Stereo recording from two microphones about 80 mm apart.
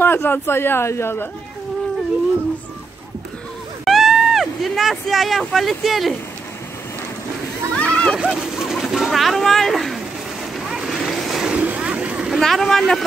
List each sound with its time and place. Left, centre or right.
0.0 s a man's voice: left
3.8 s a sound: centre
5.4 s speech: centre
7.7 s speech: centre
8.2 s speech: centre
10.7 s boat: centre
11.5 s vehicle: centre
12.4 s speech: centre